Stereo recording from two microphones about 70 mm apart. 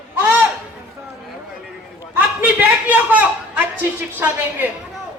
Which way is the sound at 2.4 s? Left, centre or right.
Right.